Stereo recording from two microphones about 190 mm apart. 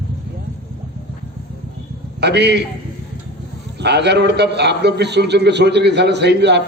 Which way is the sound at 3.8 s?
65° right (ahead or behind).